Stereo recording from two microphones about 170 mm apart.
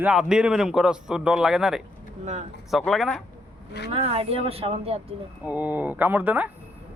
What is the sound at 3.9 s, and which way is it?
Speech, 35° right (ahead or behind).